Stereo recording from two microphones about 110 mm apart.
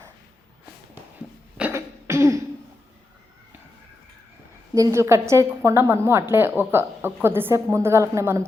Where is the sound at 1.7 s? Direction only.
25° right (ahead or behind).